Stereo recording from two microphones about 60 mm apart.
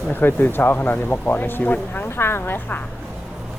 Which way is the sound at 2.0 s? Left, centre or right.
Left.